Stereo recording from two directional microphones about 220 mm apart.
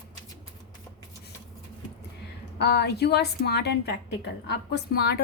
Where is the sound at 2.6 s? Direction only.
50° left (ahead or behind).